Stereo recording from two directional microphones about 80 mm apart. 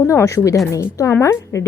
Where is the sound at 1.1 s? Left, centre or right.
Left.